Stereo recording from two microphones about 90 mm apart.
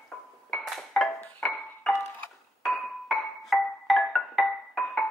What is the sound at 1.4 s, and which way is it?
Music, 5° left (ahead or behind).